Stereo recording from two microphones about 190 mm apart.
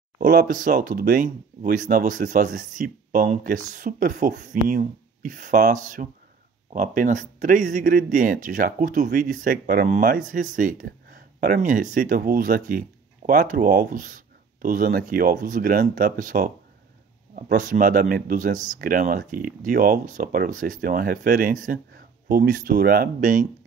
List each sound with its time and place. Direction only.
0.2 s speech: 45° right (ahead or behind)